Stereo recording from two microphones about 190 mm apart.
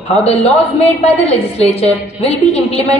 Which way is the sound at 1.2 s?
35° left (ahead or behind).